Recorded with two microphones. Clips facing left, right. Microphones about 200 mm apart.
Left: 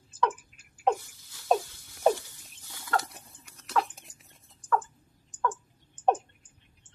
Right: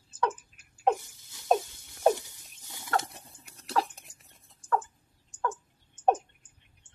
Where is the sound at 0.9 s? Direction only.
20° right (ahead or behind).